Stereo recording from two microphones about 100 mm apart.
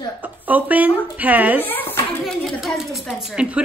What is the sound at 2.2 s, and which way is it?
A woman's voice, 5° left (ahead or behind).